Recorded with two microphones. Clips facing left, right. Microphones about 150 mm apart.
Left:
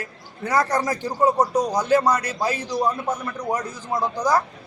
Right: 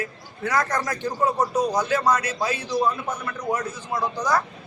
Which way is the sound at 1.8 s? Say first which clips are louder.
Left 3 dB; 35° left (ahead or behind).